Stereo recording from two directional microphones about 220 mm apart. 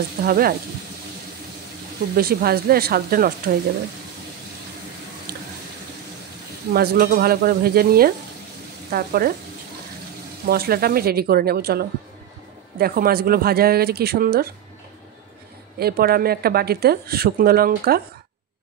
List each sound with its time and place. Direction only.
0.2 s speech: 40° right (ahead or behind)
2.1 s speech: 45° right (ahead or behind)
6.7 s speech: 45° right (ahead or behind)
10.4 s speech: 45° right (ahead or behind)
15.8 s speech: 45° right (ahead or behind)